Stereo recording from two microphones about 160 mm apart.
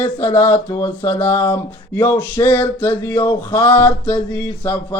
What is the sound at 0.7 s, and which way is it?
Speech, 30° left (ahead or behind).